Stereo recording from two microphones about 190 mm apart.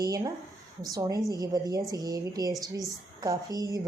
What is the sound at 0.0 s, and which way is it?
A woman's voice, 20° right (ahead or behind).